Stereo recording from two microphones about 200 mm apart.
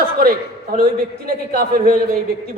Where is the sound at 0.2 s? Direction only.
45° right (ahead or behind).